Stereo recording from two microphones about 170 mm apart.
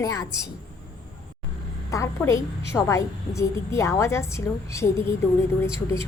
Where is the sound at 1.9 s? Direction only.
20° left (ahead or behind).